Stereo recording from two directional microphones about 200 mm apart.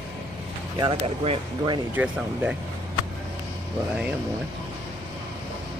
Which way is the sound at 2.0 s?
10° right (ahead or behind).